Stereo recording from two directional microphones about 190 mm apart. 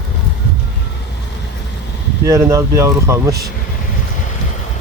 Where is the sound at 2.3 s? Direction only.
15° right (ahead or behind).